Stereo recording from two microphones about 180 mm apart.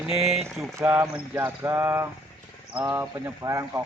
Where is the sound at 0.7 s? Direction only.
10° right (ahead or behind).